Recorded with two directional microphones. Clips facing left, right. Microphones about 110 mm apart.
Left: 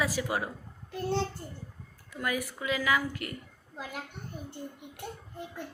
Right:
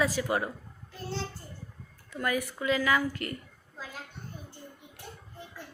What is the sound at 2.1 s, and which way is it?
A woman's voice, 10° left (ahead or behind).